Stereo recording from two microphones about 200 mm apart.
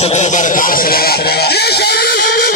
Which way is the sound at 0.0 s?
35° left (ahead or behind).